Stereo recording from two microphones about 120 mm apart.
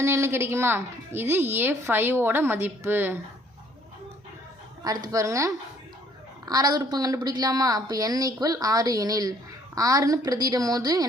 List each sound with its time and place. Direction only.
0.0 s a woman's voice: 20° right (ahead or behind)
4.8 s a woman's voice: 30° right (ahead or behind)